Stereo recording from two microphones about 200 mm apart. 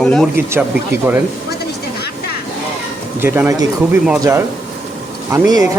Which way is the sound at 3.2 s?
10° right (ahead or behind).